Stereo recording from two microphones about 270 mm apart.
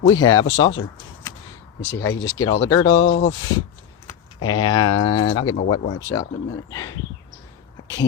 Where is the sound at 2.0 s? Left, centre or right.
Left.